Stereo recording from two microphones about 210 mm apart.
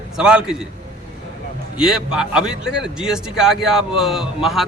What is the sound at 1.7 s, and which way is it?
A man's voice, 5° right (ahead or behind).